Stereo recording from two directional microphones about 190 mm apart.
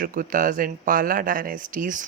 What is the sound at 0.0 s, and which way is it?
A woman's voice, 45° right (ahead or behind).